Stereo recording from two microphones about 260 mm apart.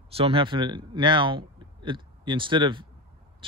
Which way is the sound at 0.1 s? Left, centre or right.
Right.